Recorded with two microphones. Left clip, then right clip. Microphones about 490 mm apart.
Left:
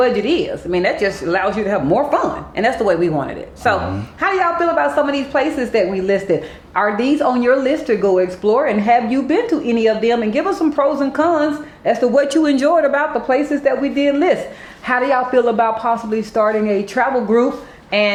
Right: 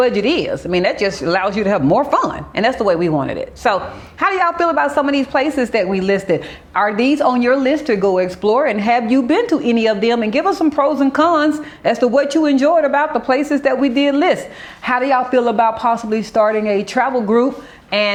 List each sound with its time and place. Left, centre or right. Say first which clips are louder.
0.0 s a woman's voice: even; right
4.2 s a woman's voice: right 1 dB; right